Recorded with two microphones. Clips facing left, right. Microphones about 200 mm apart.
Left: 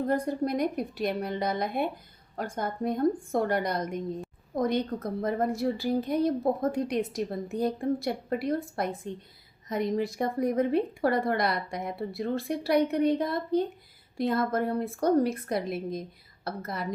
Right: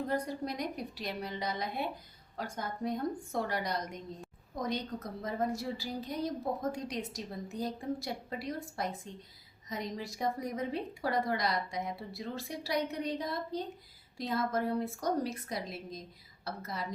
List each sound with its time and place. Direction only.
0.1 s a woman's voice: 55° left (ahead or behind)